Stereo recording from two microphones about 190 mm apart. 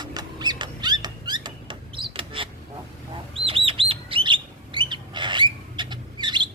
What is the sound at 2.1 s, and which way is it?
Bird, 25° right (ahead or behind).